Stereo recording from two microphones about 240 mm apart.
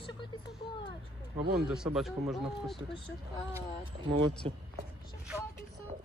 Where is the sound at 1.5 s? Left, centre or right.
Centre.